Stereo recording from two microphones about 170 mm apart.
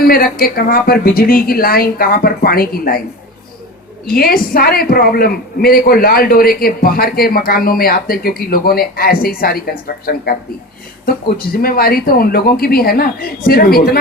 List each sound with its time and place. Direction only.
0.0 s a woman's voice: 60° left (ahead or behind)
4.0 s a woman's voice: 60° left (ahead or behind)
11.5 s a woman's voice: 60° left (ahead or behind)